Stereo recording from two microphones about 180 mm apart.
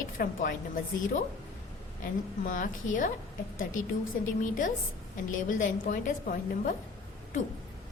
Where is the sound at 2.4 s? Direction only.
45° left (ahead or behind).